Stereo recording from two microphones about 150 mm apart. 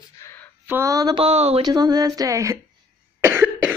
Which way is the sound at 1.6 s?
25° right (ahead or behind).